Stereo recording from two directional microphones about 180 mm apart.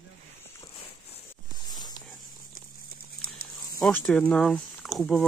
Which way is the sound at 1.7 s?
20° left (ahead or behind).